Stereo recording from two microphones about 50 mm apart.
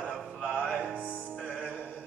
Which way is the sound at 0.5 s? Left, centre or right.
Centre.